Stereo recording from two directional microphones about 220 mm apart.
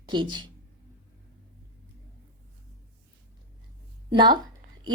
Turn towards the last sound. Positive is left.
turn(degrees=-20)  # may be behind; listen again after turning